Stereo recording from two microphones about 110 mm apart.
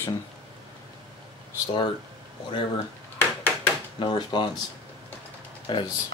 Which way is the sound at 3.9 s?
45° left (ahead or behind).